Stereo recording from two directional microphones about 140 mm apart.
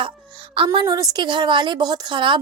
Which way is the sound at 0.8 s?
25° right (ahead or behind).